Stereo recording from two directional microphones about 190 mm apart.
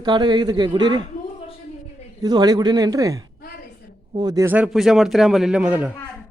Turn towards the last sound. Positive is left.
turn(degrees=-5)  # may be behind; listen again after turning